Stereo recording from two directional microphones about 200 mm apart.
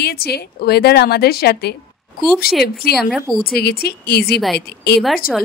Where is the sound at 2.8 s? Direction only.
50° left (ahead or behind).